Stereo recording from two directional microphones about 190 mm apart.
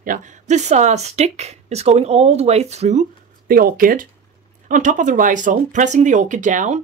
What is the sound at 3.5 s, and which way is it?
Speech, 50° right (ahead or behind).